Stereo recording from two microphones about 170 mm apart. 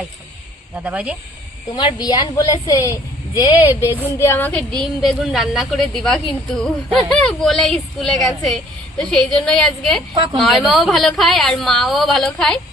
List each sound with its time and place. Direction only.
0.8 s speech: 10° right (ahead or behind)
1.7 s a woman's voice: 25° left (ahead or behind)
3.7 s a woman's voice: 15° left (ahead or behind)